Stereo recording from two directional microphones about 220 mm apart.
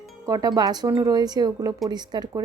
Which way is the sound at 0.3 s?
15° right (ahead or behind).